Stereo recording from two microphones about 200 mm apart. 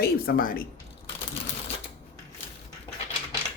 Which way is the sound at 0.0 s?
50° left (ahead or behind).